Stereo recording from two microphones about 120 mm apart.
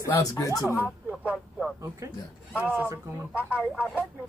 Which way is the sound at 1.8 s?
25° right (ahead or behind).